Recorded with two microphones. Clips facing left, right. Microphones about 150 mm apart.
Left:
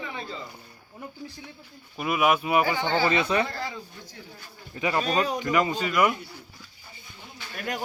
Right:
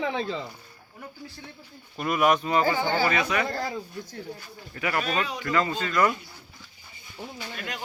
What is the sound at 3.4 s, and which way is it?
Speech, 35° right (ahead or behind).